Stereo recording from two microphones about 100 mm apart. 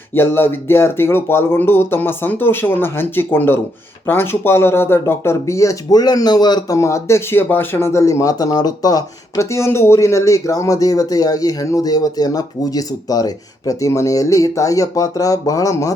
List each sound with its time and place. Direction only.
0.1 s speech: 20° left (ahead or behind); by 6.7 s 45° left (ahead or behind)
6.7 s speech: 30° left (ahead or behind)